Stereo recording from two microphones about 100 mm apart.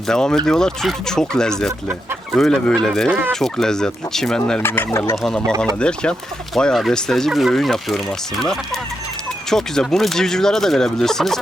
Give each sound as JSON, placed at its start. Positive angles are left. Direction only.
{"t": 0.1, "sound": "speech", "side_deg": 5}
{"t": 3.1, "sound": "speech", "side_deg": -20}
{"t": 3.3, "sound": "speech", "side_deg": 5}
{"t": 4.6, "sound": "speech", "side_deg": 20}
{"t": 5.1, "sound": "speech", "side_deg": 0}